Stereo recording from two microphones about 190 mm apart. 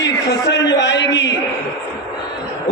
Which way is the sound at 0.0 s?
65° left (ahead or behind).